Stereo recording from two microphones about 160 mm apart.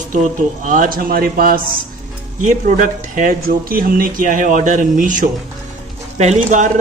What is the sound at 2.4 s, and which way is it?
Speech, 50° right (ahead or behind).